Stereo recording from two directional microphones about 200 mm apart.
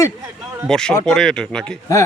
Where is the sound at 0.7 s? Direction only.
5° left (ahead or behind).